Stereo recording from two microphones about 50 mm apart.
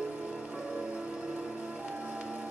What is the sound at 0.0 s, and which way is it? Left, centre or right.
Music, centre.